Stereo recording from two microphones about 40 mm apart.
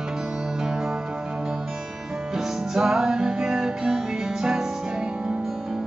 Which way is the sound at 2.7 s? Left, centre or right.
Centre.